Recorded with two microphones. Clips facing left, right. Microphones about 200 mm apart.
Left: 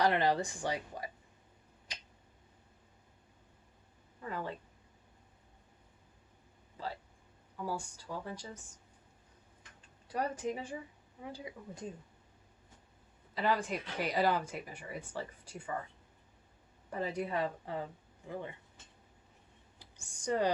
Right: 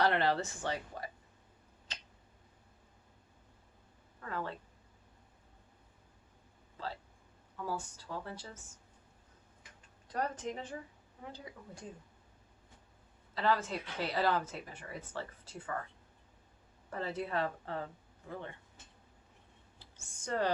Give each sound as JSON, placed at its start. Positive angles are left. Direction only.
{"t": 0.0, "sound": "speech", "side_deg": 15}
{"t": 1.9, "sound": "finger snapping", "side_deg": 10}
{"t": 4.2, "sound": "speech", "side_deg": 15}
{"t": 6.7, "sound": "a sound", "side_deg": 10}
{"t": 7.5, "sound": "speech", "side_deg": 10}
{"t": 10.1, "sound": "speech", "side_deg": 10}
{"t": 13.3, "sound": "speech", "side_deg": 15}
{"t": 16.9, "sound": "speech", "side_deg": 15}
{"t": 19.8, "sound": "speech", "side_deg": 15}